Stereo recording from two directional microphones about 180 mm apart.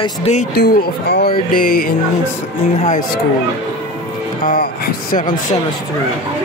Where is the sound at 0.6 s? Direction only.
60° left (ahead or behind).